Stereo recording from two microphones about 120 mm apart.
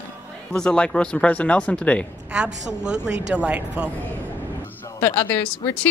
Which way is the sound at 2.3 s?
5° right (ahead or behind).